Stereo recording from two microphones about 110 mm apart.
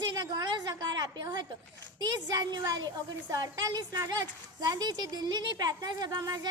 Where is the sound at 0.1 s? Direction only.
40° right (ahead or behind).